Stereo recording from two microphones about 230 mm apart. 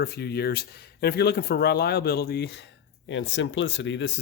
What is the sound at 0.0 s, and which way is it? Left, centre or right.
Speech, left.